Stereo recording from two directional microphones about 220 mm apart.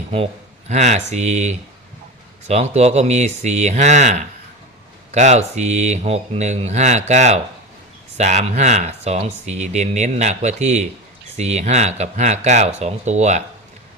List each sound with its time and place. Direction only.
0.7 s speech: 30° right (ahead or behind)